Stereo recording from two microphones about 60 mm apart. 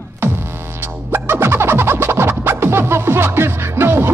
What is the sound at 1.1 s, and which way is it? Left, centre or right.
Music, right.